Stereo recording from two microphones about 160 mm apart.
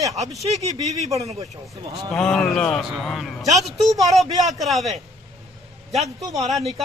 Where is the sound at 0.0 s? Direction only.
20° right (ahead or behind).